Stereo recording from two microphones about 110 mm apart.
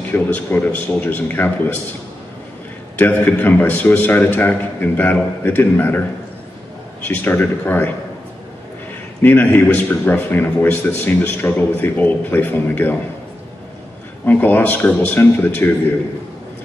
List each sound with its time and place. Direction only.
0.1 s speech: 15° left (ahead or behind)
3.0 s speech: 15° left (ahead or behind)
7.1 s speech: 15° left (ahead or behind)
9.2 s speech: 15° left (ahead or behind)
14.2 s speech: 15° left (ahead or behind)